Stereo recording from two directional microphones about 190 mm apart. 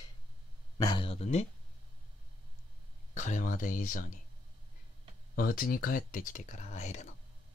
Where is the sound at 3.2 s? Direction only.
40° left (ahead or behind).